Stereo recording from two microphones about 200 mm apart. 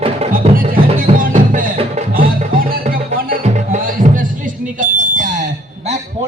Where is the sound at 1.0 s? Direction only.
45° right (ahead or behind).